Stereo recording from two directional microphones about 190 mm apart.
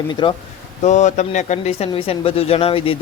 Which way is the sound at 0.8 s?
40° left (ahead or behind).